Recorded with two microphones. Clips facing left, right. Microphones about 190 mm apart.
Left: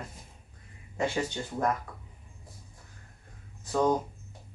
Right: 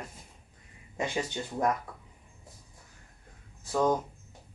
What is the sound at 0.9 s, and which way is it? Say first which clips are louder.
Speech: left 2 dB; 15° right (ahead or behind).